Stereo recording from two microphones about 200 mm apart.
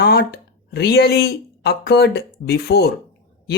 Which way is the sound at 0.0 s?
55° left (ahead or behind).